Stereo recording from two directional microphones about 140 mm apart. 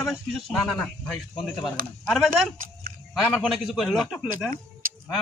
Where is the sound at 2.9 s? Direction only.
80° right.